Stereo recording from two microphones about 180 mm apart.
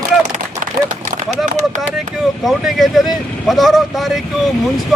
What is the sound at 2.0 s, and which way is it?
Speech, centre (ahead or behind).